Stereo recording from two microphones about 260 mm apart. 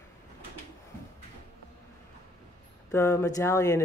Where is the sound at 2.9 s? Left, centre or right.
Centre.